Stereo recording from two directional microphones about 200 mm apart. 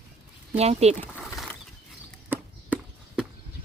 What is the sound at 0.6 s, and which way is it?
Speech, 30° right (ahead or behind).